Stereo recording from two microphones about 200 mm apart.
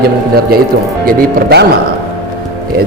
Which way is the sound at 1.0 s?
55° right (ahead or behind).